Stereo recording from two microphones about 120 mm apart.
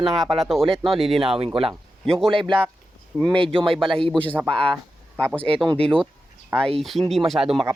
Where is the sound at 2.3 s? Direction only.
45° right (ahead or behind).